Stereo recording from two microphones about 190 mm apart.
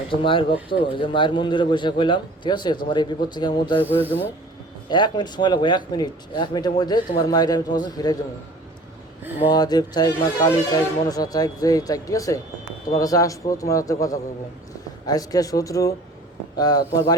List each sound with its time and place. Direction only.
0.1 s speech: 25° left (ahead or behind)
3.8 s a man's voice: 10° left (ahead or behind)
4.9 s speech: 25° left (ahead or behind)
9.5 s a man's voice: 20° left (ahead or behind)